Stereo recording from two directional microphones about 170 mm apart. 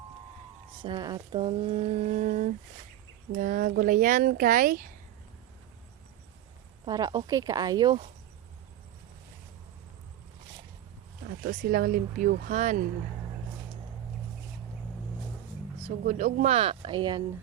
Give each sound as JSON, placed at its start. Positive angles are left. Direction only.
{"t": 0.8, "sound": "speech", "side_deg": -25}
{"t": 6.8, "sound": "speech", "side_deg": -25}
{"t": 11.4, "sound": "speech", "side_deg": -60}
{"t": 16.0, "sound": "speech", "side_deg": -45}